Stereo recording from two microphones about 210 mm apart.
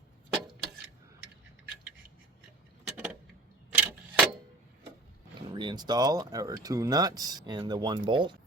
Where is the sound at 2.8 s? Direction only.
5° right (ahead or behind).